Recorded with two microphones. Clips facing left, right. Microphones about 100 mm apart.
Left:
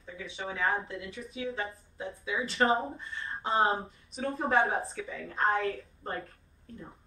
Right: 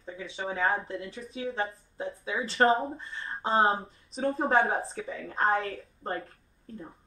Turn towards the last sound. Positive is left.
turn(degrees=-30)  # may be behind; listen again after turning